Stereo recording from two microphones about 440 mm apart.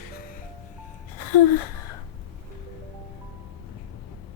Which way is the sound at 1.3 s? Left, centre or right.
Left.